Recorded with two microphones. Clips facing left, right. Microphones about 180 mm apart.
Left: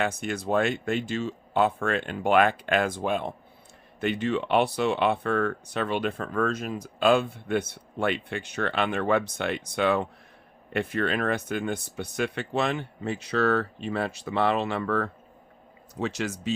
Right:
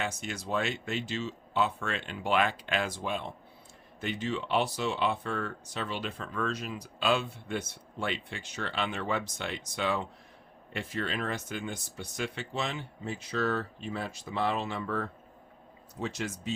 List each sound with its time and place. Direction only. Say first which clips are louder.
0.0 s speech: left 7 dB; 55° left (ahead or behind); by 16.6 s 85° left